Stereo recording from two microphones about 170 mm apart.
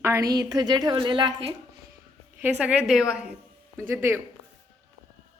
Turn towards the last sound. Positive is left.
turn(degrees=-15)  # may be behind; listen again after turning